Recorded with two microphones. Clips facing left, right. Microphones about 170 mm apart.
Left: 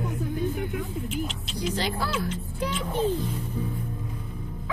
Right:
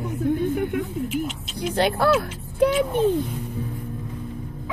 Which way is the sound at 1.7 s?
60° right (ahead or behind).